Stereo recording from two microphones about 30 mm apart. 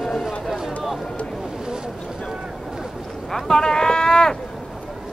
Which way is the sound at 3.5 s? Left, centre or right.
Left.